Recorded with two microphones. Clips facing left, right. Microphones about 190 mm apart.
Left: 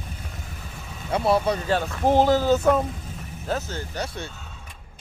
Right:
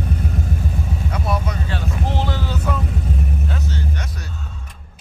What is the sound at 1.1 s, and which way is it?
Vehicle, 30° left (ahead or behind).